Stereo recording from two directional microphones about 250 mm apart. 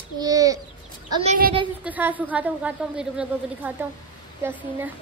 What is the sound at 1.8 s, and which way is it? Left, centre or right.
A woman's voice, centre.